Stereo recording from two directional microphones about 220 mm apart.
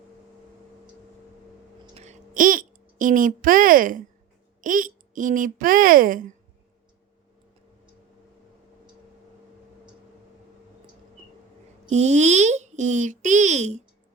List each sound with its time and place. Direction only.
2.0 s a sound: 35° right (ahead or behind)
4.6 s speech: 35° right (ahead or behind)
11.9 s speech: 30° right (ahead or behind)